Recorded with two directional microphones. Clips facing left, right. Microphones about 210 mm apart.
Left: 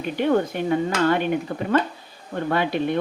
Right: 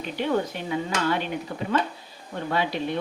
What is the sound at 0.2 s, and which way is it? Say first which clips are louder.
Speech: left 5 dB; 50° left (ahead or behind).